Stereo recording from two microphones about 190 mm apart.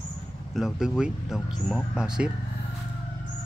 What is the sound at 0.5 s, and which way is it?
Speech, 5° right (ahead or behind).